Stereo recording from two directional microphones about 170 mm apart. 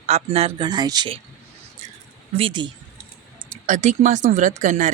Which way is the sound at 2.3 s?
30° right (ahead or behind).